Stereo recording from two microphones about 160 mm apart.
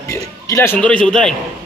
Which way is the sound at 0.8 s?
5° left (ahead or behind).